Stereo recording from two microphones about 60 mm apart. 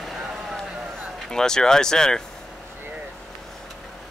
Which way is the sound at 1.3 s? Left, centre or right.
Centre.